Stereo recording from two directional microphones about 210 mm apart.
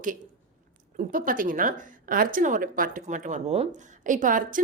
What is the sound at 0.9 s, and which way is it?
A woman's voice, 40° right (ahead or behind).